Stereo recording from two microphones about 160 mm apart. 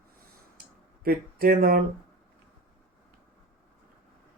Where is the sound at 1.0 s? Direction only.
70° right (ahead or behind).